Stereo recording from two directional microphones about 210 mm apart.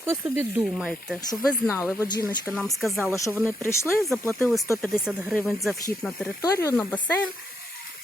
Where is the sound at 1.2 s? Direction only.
15° left (ahead or behind); by 3.1 s centre (ahead or behind).